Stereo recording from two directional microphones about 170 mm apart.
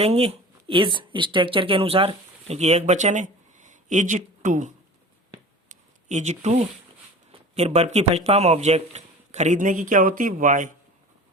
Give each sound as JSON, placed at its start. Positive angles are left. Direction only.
{"t": 0.0, "sound": "speech", "side_deg": -35}
{"t": 5.6, "sound": "a sound", "side_deg": -45}
{"t": 7.5, "sound": "speech", "side_deg": -40}